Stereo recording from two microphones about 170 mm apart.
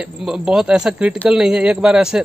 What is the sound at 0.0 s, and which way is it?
Speech, 5° right (ahead or behind).